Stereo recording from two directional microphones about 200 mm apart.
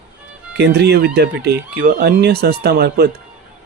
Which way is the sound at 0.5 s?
55° right (ahead or behind).